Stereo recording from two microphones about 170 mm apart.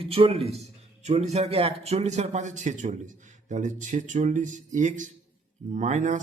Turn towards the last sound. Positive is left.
turn(degrees=-45)  # may be behind; listen again after turning